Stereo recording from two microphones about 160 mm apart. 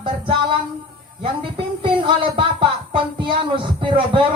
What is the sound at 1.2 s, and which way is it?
Music, 35° right (ahead or behind).